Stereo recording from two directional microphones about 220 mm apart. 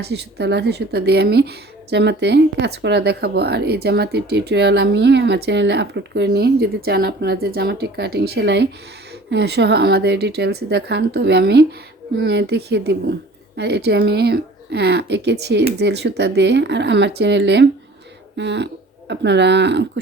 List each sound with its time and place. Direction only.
0.0 s speech: 50° right (ahead or behind)